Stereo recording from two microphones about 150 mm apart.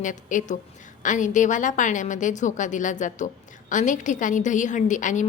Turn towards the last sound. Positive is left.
turn(degrees=55)  # may be behind; listen again after turning